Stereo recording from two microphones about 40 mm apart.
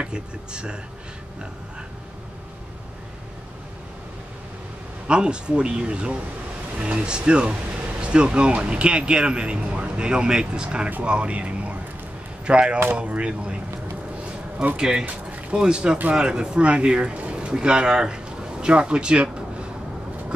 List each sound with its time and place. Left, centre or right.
0.0 s speech: right
5.0 s speech: right
14.8 s a man's voice: centre